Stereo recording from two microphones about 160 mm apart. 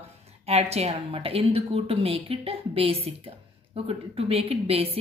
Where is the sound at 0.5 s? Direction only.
40° right (ahead or behind).